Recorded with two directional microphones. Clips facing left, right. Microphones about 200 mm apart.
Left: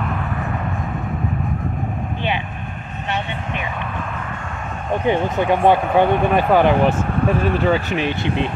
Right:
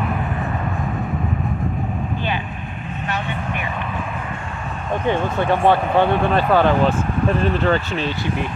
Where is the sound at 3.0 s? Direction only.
25° left (ahead or behind).